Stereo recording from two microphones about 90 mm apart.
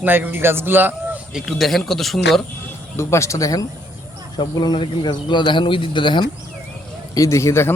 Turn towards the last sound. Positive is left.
turn(degrees=30)  # may be behind; listen again after turning